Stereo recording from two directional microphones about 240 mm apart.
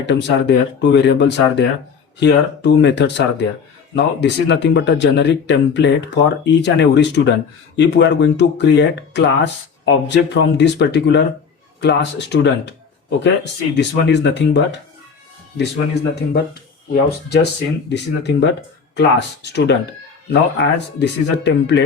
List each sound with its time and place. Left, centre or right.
0.0 s speech: left